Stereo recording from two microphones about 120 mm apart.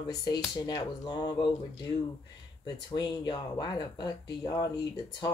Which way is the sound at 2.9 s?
40° left (ahead or behind).